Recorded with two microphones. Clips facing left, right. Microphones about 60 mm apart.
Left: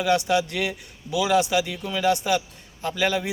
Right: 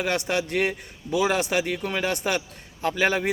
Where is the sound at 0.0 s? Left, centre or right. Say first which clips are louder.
Left 4 dB; right.